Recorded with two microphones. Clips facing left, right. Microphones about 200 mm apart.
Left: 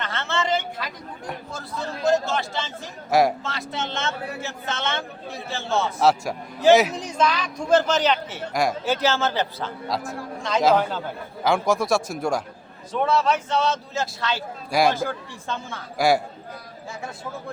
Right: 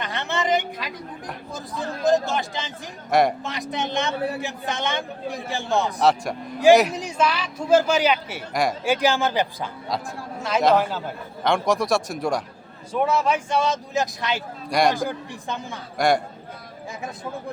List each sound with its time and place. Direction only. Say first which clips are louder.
0.0 s a sound: right 1 dB; 15° right (ahead or behind)
1.5 s a man's voice: right 4 dB; 15° right (ahead or behind)
3.1 s speech: even; centre (ahead or behind)
3.4 s speech: right 2 dB; 15° right (ahead or behind)
6.0 s speech: even; centre (ahead or behind)
9.9 s speech: left 1 dB; centre (ahead or behind)
12.9 s speech: even; 10° right (ahead or behind)
14.7 s speech: even; 5° left (ahead or behind)
14.9 s speech: right 1 dB; 15° right (ahead or behind)
16.0 s speech: even; 5° left (ahead or behind)